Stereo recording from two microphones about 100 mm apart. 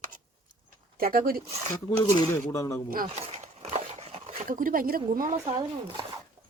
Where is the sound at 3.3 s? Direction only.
90° right.